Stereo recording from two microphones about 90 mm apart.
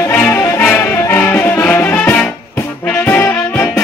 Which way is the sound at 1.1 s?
15° left (ahead or behind).